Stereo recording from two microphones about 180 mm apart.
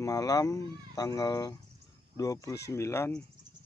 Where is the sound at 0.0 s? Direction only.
20° left (ahead or behind).